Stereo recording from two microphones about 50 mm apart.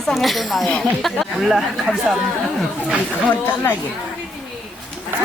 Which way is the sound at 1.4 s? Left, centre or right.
Centre.